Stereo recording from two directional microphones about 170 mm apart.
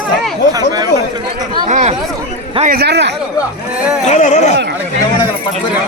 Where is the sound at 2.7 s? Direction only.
70° right (ahead or behind).